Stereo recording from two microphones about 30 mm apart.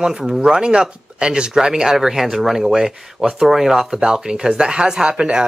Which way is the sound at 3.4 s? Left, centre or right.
Centre.